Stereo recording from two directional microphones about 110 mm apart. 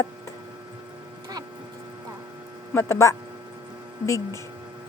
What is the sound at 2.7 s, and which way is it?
A woman's voice, 25° left (ahead or behind).